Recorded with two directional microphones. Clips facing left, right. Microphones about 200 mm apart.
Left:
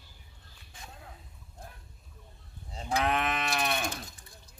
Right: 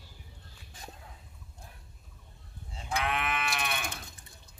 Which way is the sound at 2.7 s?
40° left (ahead or behind).